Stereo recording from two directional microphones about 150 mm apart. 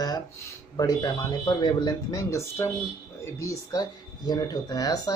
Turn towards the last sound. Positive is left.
turn(degrees=25)  # may be behind; listen again after turning